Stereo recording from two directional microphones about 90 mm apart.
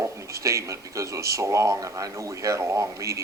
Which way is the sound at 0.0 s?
35° right (ahead or behind).